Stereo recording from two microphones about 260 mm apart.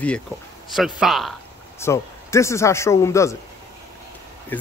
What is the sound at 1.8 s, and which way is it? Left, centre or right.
Speech, centre.